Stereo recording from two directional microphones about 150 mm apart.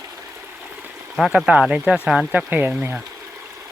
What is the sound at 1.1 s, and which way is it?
Speech, centre (ahead or behind).